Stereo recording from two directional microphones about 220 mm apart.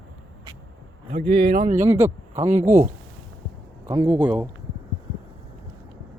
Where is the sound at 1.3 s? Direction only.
40° right (ahead or behind).